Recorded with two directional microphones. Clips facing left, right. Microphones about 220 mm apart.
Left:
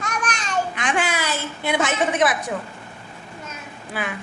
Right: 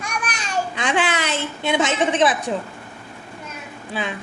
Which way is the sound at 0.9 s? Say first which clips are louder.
Right 3 dB; 20° right (ahead or behind).